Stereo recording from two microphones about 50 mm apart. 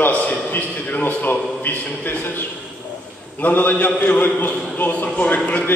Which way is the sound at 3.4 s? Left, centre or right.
Left.